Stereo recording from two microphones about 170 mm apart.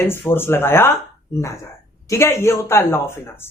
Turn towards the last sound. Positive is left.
turn(degrees=15)  # may be behind; listen again after turning